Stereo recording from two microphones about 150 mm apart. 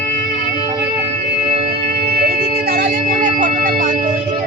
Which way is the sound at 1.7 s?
90° right.